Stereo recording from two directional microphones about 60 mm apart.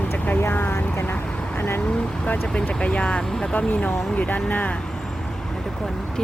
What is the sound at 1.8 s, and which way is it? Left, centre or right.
Speech, centre.